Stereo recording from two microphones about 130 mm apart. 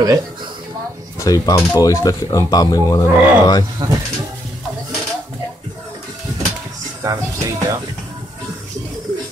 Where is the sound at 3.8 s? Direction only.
35° right (ahead or behind).